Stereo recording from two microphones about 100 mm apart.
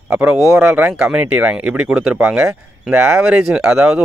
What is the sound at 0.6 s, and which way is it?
Speech, 20° right (ahead or behind).